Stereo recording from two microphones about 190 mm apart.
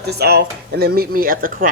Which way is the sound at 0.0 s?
60° right (ahead or behind).